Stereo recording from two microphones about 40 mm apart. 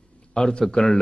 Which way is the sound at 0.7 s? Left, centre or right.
Left.